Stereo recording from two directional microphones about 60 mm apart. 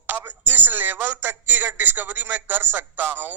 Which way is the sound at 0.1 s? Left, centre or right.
Right.